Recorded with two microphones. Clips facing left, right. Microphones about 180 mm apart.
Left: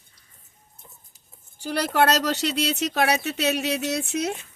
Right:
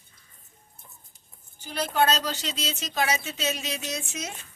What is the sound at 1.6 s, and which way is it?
Speech, 80° left.